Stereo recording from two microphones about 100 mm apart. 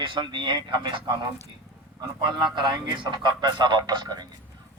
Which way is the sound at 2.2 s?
50° right (ahead or behind).